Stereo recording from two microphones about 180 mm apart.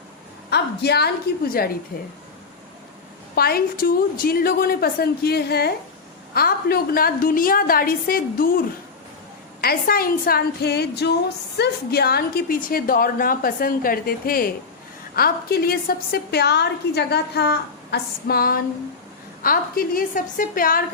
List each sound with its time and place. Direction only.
0.5 s a woman's voice: 65° left (ahead or behind)
3.3 s a woman's voice: 60° left (ahead or behind)